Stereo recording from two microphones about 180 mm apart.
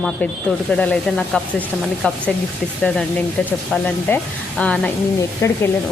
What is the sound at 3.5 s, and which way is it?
Speech, 10° left (ahead or behind).